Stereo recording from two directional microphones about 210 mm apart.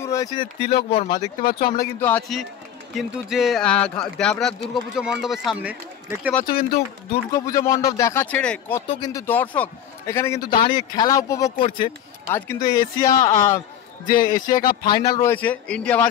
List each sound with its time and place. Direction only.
0.0 s speech: 15° left (ahead or behind)
1.4 s speech: 45° left (ahead or behind)
2.0 s a man's voice: 10° left (ahead or behind)
6.4 s speech: 45° left (ahead or behind)
7.3 s a man's voice: 15° left (ahead or behind)
8.8 s a man's voice: 20° left (ahead or behind)
14.0 s a man's voice: 40° left (ahead or behind)
14.3 s a man's voice: 20° left (ahead or behind)